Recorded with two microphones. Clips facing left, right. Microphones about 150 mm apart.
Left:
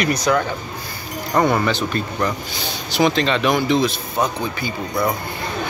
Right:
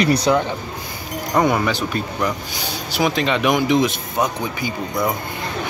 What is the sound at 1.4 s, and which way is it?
Speech, 10° right (ahead or behind).